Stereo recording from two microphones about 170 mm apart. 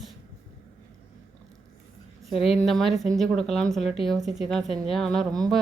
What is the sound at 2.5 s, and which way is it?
Speech, centre (ahead or behind).